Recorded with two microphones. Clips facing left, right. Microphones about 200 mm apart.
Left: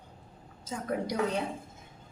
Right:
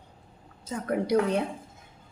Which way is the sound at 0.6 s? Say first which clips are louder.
Right 4 dB; 60° right (ahead or behind).